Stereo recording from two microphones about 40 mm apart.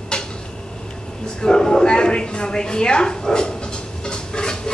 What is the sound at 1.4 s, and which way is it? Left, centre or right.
A woman's voice, centre.